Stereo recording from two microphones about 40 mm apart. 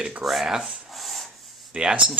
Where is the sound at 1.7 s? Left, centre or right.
Right.